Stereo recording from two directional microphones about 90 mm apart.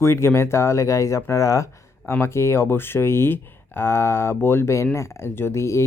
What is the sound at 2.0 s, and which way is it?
Speech, 25° left (ahead or behind).